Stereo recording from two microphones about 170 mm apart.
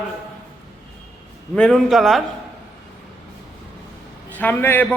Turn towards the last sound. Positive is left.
turn(degrees=10)  # may be behind; listen again after turning